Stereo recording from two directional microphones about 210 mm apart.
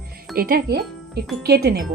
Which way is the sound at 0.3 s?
45° right (ahead or behind).